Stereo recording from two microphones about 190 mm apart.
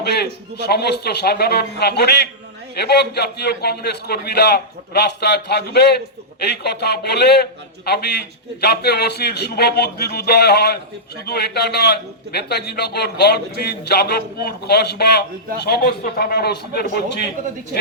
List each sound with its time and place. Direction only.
0.5 s a man's voice: 60° left (ahead or behind)